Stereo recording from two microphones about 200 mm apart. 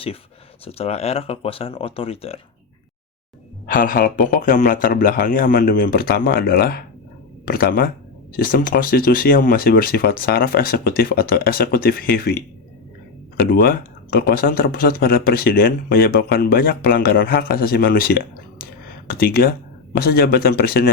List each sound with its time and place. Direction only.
0.6 s speech: 30° left (ahead or behind)
3.7 s speech: 45° left (ahead or behind)
13.4 s speech: 50° left (ahead or behind)